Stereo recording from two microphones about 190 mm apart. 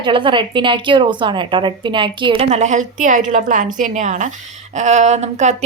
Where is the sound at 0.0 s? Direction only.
25° right (ahead or behind).